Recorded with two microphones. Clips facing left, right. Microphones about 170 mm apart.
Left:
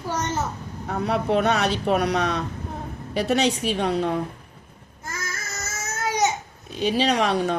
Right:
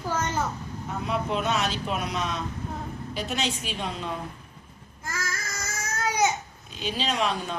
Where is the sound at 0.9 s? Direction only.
60° left (ahead or behind).